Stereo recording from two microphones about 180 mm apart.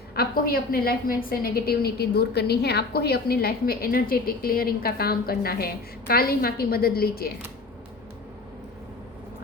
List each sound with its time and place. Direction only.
0.1 s a woman's voice: 55° left (ahead or behind)